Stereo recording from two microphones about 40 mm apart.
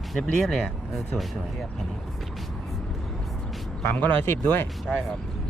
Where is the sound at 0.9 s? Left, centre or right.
Centre.